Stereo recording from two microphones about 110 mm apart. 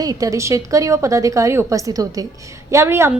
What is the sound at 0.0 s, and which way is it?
A woman's voice, 35° right (ahead or behind).